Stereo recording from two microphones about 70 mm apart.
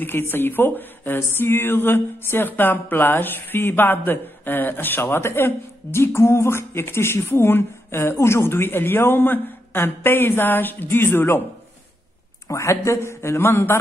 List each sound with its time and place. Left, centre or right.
0.0 s speech: left
12.4 s speech: left